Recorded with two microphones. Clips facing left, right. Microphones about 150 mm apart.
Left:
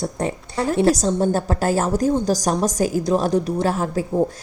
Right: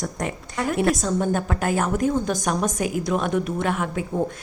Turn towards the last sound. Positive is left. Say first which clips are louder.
# left 4 dB
turn(degrees=35)  # may be behind; listen again after turning